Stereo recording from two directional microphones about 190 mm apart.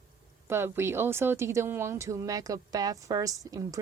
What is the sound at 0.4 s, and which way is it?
Speech, 15° right (ahead or behind).